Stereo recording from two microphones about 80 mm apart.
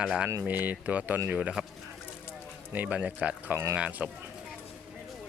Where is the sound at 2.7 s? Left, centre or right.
Centre.